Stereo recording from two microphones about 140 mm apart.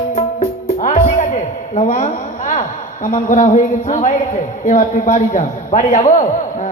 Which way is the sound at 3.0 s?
65° left (ahead or behind).